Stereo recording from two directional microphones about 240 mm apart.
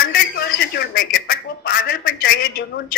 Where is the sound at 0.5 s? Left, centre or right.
Left.